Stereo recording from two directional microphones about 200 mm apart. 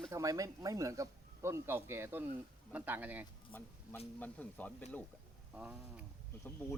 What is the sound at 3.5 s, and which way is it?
Speech, 10° left (ahead or behind).